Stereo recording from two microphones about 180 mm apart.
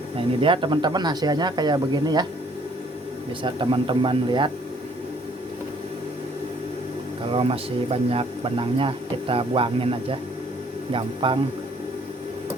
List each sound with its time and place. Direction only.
0.4 s speech: 25° right (ahead or behind)
3.4 s speech: 25° right (ahead or behind)
7.3 s speech: 30° right (ahead or behind)